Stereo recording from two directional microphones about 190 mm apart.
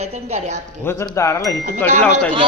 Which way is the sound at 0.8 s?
15° left (ahead or behind).